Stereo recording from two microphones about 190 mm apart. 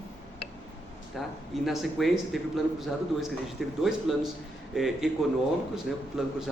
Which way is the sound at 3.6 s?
Centre (ahead or behind).